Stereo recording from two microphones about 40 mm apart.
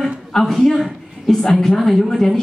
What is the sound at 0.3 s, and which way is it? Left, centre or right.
A man's voice, centre.